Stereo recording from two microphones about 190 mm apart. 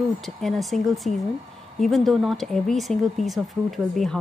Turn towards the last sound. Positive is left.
turn(degrees=0)  # may be behind; listen again after turning